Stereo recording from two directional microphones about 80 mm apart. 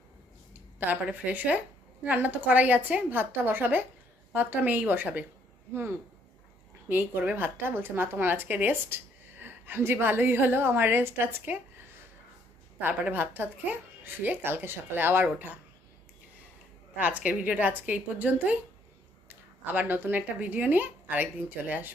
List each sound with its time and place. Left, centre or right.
0.9 s a woman's voice: centre
6.8 s a woman's voice: right
12.8 s a woman's voice: right
17.0 s a woman's voice: centre